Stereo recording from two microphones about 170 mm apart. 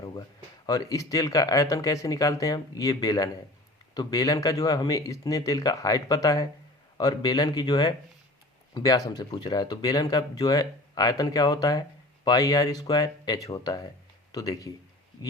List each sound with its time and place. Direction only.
0.0 s speech: 25° left (ahead or behind)